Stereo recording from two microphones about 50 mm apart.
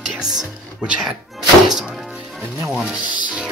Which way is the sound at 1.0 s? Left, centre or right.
Centre.